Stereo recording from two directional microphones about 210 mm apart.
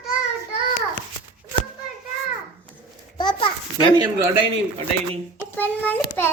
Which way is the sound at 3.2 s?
25° left (ahead or behind).